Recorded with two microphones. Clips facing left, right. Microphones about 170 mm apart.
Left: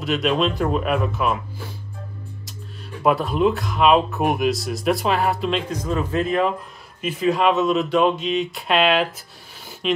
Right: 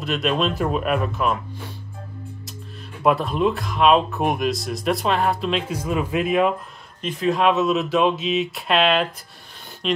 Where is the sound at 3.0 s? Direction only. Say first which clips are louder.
Left 1 dB; centre (ahead or behind).